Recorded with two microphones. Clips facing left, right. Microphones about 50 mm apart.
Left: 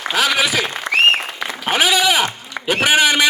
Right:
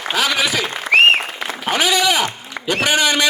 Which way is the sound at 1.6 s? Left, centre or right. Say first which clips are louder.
Left 1 dB; centre.